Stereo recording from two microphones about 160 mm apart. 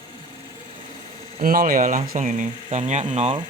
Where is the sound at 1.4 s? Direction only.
60° right (ahead or behind); by 3.4 s 45° right (ahead or behind).